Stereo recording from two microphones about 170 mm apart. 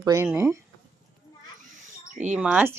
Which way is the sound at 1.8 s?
45° right (ahead or behind).